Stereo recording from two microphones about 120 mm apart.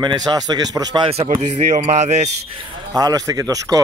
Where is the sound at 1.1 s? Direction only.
65° right (ahead or behind).